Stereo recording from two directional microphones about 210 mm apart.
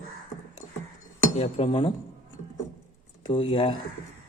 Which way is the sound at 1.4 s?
25° left (ahead or behind).